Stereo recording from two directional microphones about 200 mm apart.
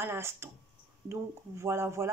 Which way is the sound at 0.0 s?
10° right (ahead or behind).